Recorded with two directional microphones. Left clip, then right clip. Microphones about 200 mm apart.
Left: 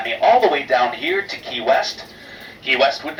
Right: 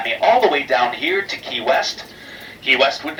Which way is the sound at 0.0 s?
Centre (ahead or behind).